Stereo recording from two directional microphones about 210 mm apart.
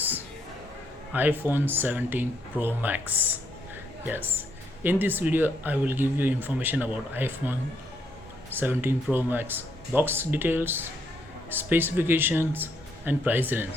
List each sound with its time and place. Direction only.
1.1 s speech: 10° right (ahead or behind)